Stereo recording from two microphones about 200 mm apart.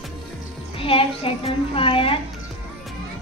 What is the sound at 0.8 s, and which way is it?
A woman's voice, 25° left (ahead or behind).